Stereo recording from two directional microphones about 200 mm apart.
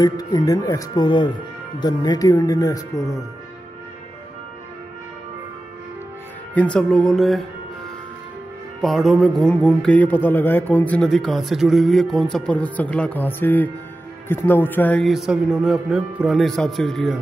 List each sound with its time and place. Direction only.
0.0 s speech: 20° left (ahead or behind)
6.5 s a man's voice: 5° left (ahead or behind)
8.8 s a man's voice: centre (ahead or behind)